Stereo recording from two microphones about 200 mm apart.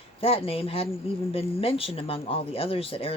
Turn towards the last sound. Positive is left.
turn(degrees=30)  # may be behind; listen again after turning